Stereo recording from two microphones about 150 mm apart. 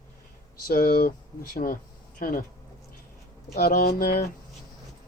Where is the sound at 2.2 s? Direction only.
65° left (ahead or behind).